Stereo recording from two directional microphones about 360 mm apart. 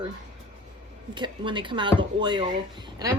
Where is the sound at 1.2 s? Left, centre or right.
Centre.